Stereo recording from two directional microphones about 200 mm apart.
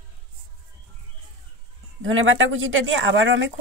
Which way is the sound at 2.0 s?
75° right (ahead or behind).